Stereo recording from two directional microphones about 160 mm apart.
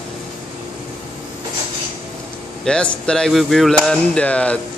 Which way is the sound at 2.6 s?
5° left (ahead or behind).